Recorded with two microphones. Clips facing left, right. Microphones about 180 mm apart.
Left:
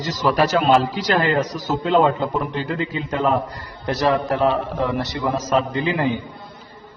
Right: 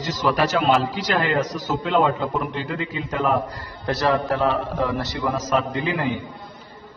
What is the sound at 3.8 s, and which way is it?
A man's voice, 20° left (ahead or behind).